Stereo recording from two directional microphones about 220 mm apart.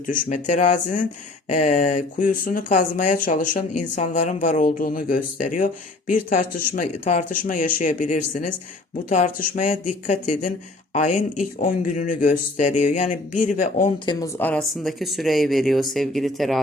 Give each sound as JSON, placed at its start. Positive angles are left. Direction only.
{"t": 0.1, "sound": "speech", "side_deg": 35}
{"t": 14.0, "sound": "speech", "side_deg": 20}
{"t": 14.3, "sound": "speech", "side_deg": 5}